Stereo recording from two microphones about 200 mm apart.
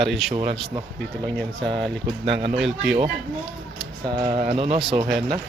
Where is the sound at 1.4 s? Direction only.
5° left (ahead or behind).